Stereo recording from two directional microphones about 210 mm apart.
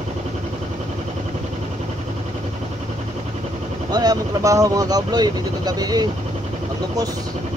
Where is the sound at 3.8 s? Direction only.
20° right (ahead or behind).